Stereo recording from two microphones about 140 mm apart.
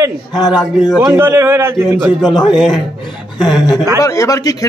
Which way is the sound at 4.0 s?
25° left (ahead or behind).